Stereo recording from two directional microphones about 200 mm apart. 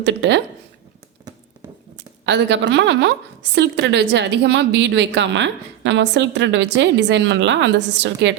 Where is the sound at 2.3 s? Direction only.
60° right (ahead or behind).